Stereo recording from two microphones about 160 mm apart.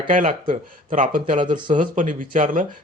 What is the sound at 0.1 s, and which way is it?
Speech, 55° right (ahead or behind).